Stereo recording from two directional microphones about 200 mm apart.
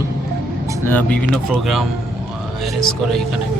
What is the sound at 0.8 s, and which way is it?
Speech, 10° left (ahead or behind).